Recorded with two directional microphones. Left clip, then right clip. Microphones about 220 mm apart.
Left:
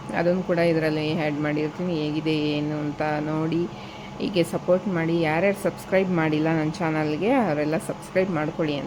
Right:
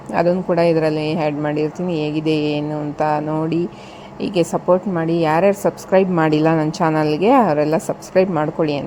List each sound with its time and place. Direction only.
0.1 s a woman's voice: 20° right (ahead or behind)